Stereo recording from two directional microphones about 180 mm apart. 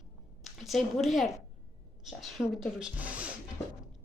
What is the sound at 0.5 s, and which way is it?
Speech, centre (ahead or behind).